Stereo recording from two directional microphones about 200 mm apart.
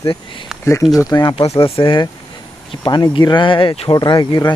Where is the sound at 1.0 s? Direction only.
20° left (ahead or behind).